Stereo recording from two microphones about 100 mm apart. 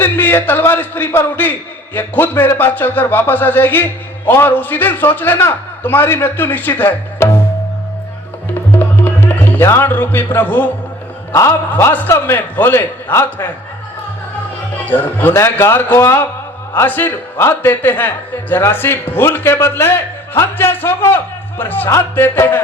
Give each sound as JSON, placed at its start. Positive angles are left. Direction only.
{"t": 0.0, "sound": "a man's voice", "side_deg": 20}
{"t": 9.0, "sound": "speech", "side_deg": 20}
{"t": 11.7, "sound": "speech", "side_deg": 20}
{"t": 14.8, "sound": "speech", "side_deg": 20}